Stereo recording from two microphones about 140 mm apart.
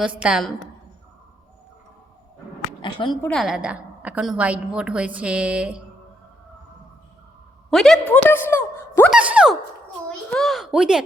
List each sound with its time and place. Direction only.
0.0 s a woman's voice: 5° right (ahead or behind)
2.8 s speech: 35° left (ahead or behind)
3.2 s a woman's voice: centre (ahead or behind)
7.7 s a woman's voice: 5° left (ahead or behind)
9.0 s a woman's voice: 10° right (ahead or behind)
10.1 s a sound: centre (ahead or behind)